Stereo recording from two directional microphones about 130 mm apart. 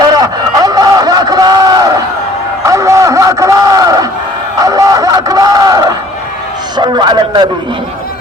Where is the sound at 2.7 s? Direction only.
25° right (ahead or behind).